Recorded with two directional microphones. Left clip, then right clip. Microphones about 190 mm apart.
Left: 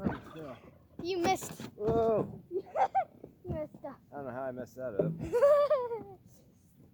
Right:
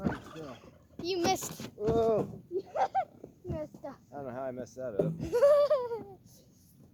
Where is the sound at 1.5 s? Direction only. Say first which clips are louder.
Right 1 dB; 10° left (ahead or behind).